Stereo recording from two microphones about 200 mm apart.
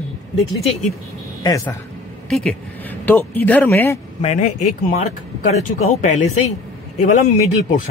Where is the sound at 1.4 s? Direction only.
15° left (ahead or behind).